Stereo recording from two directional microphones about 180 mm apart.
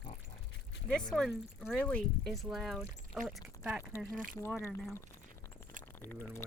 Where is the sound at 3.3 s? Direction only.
5° right (ahead or behind).